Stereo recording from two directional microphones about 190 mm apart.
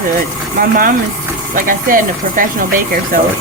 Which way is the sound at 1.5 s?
45° right (ahead or behind).